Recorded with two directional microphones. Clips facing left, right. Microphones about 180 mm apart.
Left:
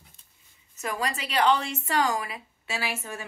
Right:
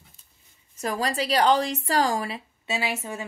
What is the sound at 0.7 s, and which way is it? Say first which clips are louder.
A woman's voice: right 4 dB; 35° right (ahead or behind).